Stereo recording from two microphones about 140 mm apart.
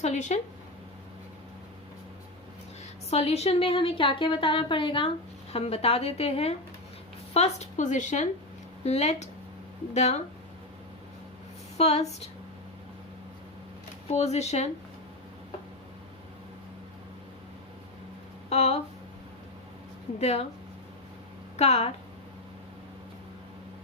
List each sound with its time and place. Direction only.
0.0 s a woman's voice: 60° left (ahead or behind)
3.1 s a woman's voice: 50° left (ahead or behind)
8.8 s a woman's voice: 50° left (ahead or behind)
11.8 s a woman's voice: 50° left (ahead or behind)
14.1 s a woman's voice: 50° left (ahead or behind)
18.4 s speech: 50° left (ahead or behind)
20.1 s a woman's voice: 50° left (ahead or behind)
21.5 s a woman's voice: 50° left (ahead or behind)